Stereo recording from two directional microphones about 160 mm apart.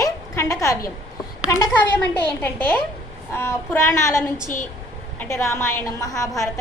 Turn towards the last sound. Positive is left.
turn(degrees=20)  # may be behind; listen again after turning